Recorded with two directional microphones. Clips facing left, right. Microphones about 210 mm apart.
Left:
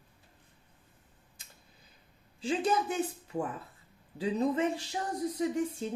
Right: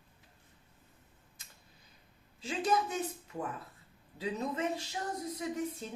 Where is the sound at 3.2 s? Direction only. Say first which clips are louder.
Left 5 dB; 30° left (ahead or behind).